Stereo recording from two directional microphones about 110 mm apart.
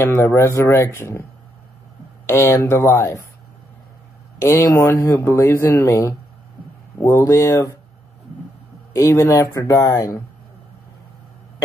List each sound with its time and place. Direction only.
0.0 s speech: 25° left (ahead or behind)
2.2 s speech: 20° left (ahead or behind)
4.4 s speech: 25° left (ahead or behind)
8.9 s speech: 25° left (ahead or behind)